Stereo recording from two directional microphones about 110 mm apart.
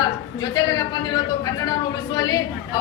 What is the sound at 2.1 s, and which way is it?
Speech, 40° left (ahead or behind).